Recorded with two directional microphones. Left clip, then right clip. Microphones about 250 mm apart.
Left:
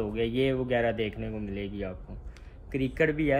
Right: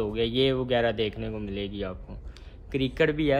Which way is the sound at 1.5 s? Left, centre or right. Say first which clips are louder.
Right 3 dB; right.